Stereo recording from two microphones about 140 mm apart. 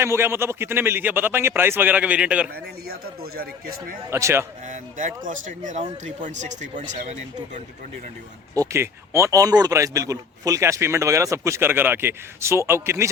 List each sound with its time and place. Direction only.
0.0 s a man's voice: 20° right (ahead or behind)
3.3 s speech: 90° right
4.1 s speech: 20° right (ahead or behind)
4.6 s speech: 65° right (ahead or behind)
8.5 s speech: 20° right (ahead or behind)